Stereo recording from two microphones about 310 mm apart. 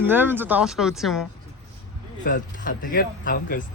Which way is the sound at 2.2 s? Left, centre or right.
Left.